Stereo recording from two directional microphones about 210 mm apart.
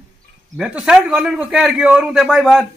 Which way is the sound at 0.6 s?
5° right (ahead or behind).